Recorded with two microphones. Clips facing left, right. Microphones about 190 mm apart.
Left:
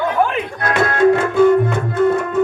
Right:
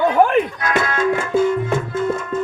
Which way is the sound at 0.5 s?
55° left (ahead or behind).